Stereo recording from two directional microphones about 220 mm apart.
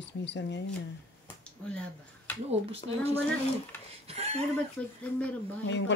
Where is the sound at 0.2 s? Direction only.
55° left (ahead or behind).